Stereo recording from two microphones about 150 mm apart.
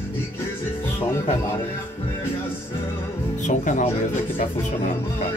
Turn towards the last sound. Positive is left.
turn(degrees=55)  # may be behind; listen again after turning